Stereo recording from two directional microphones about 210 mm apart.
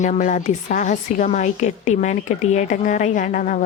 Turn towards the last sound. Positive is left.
turn(degrees=40)  # may be behind; listen again after turning